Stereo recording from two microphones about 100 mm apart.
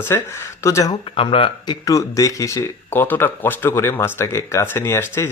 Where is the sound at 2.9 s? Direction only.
20° left (ahead or behind).